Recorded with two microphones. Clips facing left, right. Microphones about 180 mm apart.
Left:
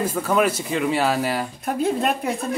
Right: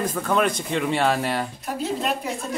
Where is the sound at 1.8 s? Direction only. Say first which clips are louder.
Left 4 dB; 55° left (ahead or behind).